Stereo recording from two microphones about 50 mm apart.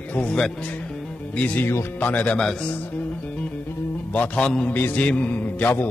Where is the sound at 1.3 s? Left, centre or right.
Left.